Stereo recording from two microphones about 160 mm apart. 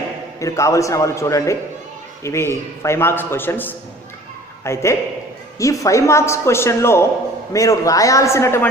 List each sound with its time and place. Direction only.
0.3 s a man's voice: 20° left (ahead or behind)